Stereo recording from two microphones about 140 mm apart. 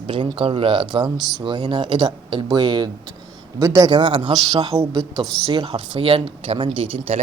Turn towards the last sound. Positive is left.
turn(degrees=-40)  # may be behind; listen again after turning